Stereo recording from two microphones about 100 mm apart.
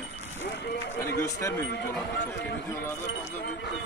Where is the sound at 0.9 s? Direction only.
30° left (ahead or behind).